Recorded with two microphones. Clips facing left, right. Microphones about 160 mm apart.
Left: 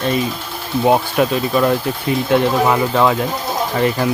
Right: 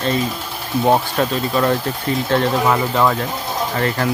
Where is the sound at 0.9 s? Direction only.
10° left (ahead or behind).